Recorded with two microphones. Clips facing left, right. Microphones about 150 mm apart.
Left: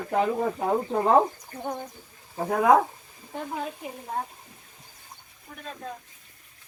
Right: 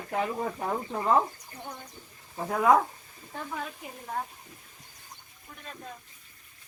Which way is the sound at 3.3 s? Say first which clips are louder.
Left 4 dB; 25° left (ahead or behind).